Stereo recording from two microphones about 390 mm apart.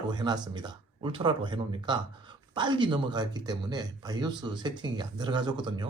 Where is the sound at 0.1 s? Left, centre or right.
Centre.